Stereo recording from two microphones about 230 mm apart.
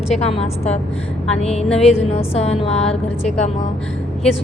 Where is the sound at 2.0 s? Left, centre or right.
Left.